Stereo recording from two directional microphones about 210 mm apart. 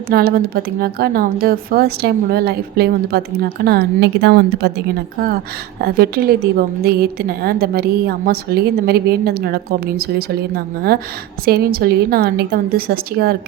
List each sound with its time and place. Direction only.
0.1 s a woman's voice: 45° right (ahead or behind)